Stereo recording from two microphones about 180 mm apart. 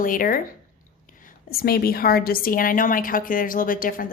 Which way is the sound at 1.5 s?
55° left (ahead or behind).